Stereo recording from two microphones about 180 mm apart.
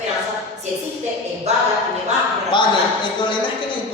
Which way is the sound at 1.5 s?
40° right (ahead or behind).